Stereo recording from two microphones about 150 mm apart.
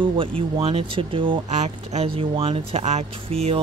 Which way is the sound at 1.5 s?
50° right (ahead or behind).